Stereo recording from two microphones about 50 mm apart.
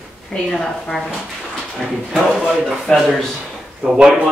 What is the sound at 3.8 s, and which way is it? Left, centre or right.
Speech, right.